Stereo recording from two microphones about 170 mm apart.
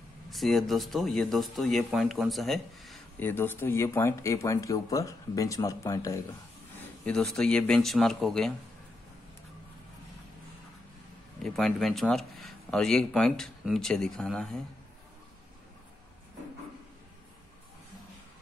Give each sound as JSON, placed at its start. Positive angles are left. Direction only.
{"t": 0.3, "sound": "speech", "side_deg": 0}
{"t": 3.2, "sound": "speech", "side_deg": 10}
{"t": 7.1, "sound": "speech", "side_deg": 5}
{"t": 11.4, "sound": "speech", "side_deg": 0}